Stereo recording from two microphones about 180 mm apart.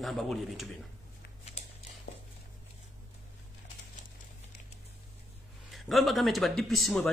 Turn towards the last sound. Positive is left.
turn(degrees=0)  # may be behind; listen again after turning